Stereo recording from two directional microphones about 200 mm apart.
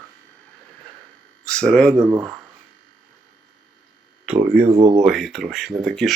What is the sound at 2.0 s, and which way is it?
Speech, 15° right (ahead or behind).